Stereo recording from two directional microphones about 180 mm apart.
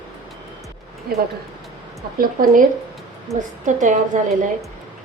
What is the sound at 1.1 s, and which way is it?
A woman's voice, 60° right (ahead or behind).